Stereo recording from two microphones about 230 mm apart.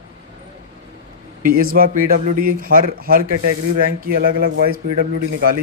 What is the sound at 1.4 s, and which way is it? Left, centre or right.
Speech, right.